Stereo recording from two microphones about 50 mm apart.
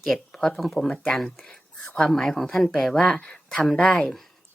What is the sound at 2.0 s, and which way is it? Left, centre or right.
Speech, centre.